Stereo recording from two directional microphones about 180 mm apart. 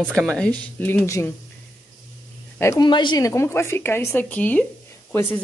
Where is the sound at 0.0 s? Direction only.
5° left (ahead or behind).